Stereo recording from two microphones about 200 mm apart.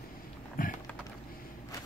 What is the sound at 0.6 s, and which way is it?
Typing, 45° left (ahead or behind).